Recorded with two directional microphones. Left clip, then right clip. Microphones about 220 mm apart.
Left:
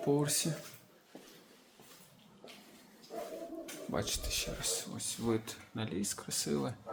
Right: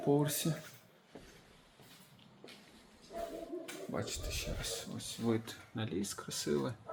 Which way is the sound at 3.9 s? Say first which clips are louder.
Left 5 dB; 15° left (ahead or behind).